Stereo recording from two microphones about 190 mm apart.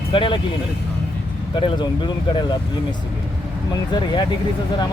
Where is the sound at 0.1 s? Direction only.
25° left (ahead or behind).